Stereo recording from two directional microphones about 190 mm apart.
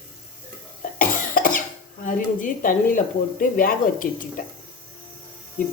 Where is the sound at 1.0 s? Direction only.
45° left (ahead or behind).